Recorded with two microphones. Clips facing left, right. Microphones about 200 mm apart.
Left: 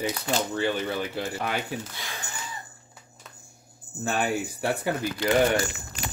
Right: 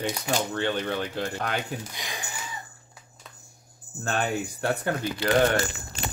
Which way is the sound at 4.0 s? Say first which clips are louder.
Left 1 dB; 10° left (ahead or behind).